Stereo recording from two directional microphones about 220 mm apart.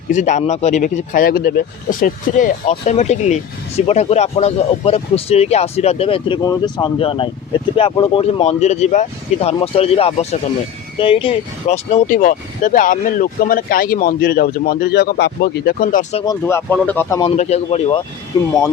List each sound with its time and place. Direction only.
0.1 s speech: 35° left (ahead or behind)
16.2 s speech: 15° left (ahead or behind)
17.3 s speech: 30° left (ahead or behind)
18.3 s speech: 20° left (ahead or behind)